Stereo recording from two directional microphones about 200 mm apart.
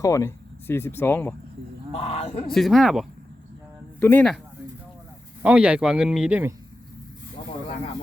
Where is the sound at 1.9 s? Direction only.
30° left (ahead or behind).